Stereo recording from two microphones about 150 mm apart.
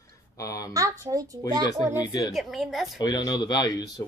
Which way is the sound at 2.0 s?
25° left (ahead or behind).